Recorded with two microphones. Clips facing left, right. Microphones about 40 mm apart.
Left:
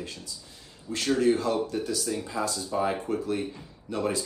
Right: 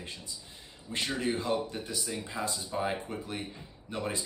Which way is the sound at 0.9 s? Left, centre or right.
Right.